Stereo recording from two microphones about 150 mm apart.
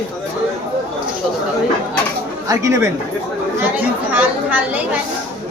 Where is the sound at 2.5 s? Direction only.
20° right (ahead or behind).